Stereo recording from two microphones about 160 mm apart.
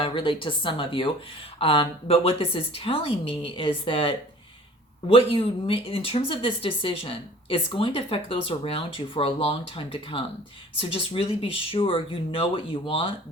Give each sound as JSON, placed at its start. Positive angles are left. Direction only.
{"t": 0.0, "sound": "speech", "side_deg": 30}